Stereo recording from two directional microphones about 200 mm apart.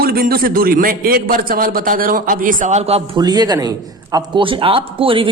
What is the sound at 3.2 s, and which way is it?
Speech, 20° right (ahead or behind).